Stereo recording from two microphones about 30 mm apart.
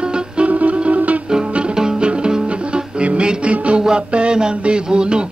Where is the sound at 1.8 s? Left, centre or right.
Right.